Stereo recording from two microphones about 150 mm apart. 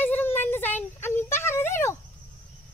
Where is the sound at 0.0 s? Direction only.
15° left (ahead or behind).